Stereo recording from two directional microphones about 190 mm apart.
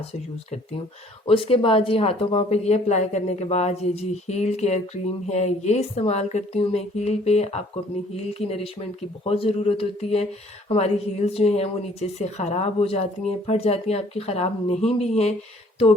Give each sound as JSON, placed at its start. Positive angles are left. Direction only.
{"t": 1.3, "sound": "speech", "side_deg": 30}